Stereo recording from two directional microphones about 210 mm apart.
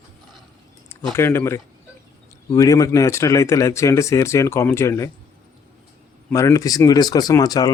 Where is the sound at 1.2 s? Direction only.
10° left (ahead or behind).